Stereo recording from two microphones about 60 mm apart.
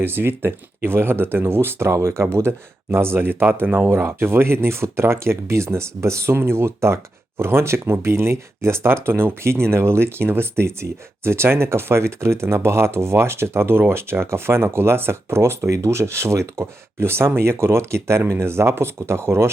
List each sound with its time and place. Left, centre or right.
0.0 s speech: right